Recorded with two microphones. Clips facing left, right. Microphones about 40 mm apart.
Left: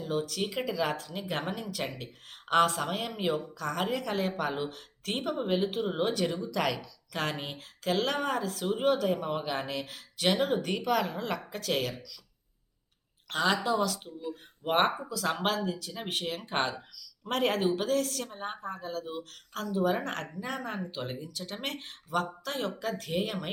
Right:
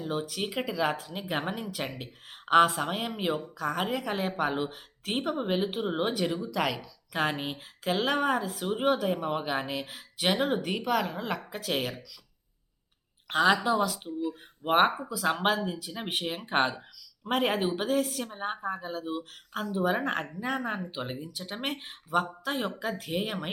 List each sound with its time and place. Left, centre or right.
0.0 s a woman's voice: centre
13.2 s a woman's voice: centre